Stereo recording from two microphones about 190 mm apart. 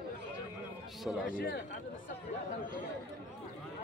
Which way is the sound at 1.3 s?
50° left (ahead or behind).